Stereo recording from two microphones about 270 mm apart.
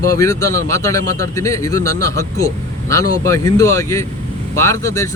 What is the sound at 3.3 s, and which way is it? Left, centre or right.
A man's voice, centre.